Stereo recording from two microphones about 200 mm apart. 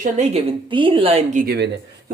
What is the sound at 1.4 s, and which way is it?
Speech, 55° right (ahead or behind).